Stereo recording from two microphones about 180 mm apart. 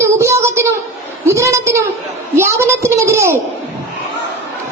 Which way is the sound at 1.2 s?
15° right (ahead or behind).